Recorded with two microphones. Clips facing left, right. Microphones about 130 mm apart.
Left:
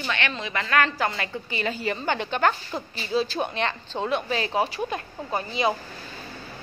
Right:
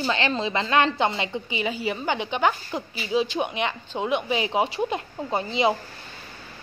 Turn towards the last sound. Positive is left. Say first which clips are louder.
# right 2 dB
turn(degrees=-20)  # may be behind; listen again after turning